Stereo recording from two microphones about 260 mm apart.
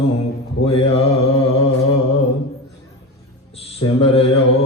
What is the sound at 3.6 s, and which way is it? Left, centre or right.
Speech, left.